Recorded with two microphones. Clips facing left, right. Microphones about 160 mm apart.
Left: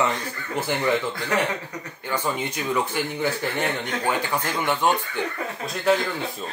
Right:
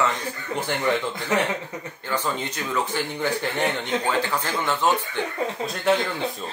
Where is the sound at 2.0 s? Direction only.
10° left (ahead or behind).